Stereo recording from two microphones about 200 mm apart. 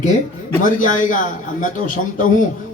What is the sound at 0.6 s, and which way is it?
Speech, 40° left (ahead or behind).